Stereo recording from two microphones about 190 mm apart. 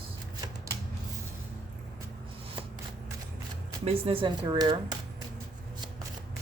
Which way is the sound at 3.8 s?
30° right (ahead or behind).